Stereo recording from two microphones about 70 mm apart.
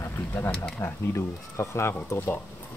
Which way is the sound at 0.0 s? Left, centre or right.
Left.